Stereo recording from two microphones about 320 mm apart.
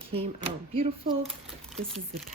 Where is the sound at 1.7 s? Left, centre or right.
Centre.